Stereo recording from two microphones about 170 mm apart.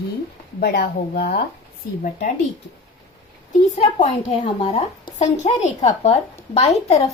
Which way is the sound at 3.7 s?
40° left (ahead or behind).